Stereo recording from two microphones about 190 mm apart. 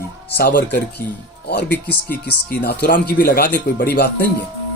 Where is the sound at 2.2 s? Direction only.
60° left (ahead or behind).